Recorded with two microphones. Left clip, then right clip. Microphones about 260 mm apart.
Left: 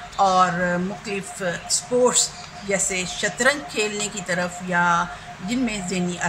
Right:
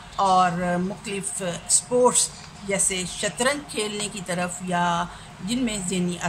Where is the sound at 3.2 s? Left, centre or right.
Right.